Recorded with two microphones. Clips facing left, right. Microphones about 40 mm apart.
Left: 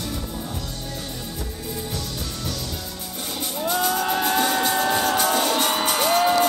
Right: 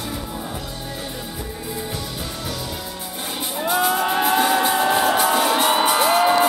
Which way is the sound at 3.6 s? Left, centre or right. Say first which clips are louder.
Right 3 dB; centre.